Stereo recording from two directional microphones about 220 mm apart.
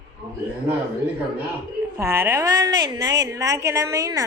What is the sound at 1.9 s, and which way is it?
A woman's voice, 10° right (ahead or behind).